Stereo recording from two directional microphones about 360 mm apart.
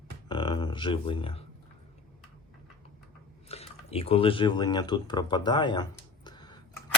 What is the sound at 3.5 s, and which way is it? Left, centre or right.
Speech, centre.